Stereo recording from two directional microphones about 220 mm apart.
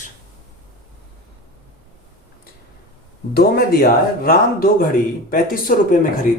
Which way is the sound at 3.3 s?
45° left (ahead or behind).